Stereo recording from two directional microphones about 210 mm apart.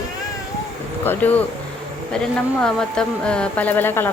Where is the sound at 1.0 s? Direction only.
10° left (ahead or behind).